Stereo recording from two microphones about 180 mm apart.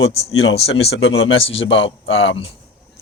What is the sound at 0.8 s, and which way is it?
Speech, 90° left.